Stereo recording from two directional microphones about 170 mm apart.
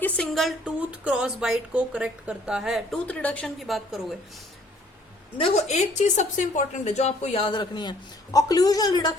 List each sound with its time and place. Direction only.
0.0 s speech: 5° left (ahead or behind)
5.4 s a woman's voice: 35° left (ahead or behind)